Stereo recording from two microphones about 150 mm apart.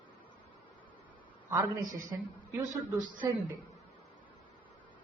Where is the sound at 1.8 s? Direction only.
60° right (ahead or behind).